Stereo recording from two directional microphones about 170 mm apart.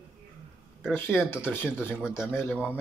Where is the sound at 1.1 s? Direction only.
5° right (ahead or behind).